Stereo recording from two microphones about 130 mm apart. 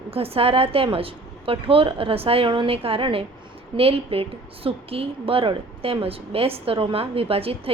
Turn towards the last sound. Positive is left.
turn(degrees=-45)  # may be behind; listen again after turning